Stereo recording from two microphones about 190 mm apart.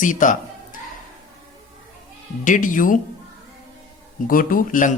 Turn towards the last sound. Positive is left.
turn(degrees=45)  # may be behind; listen again after turning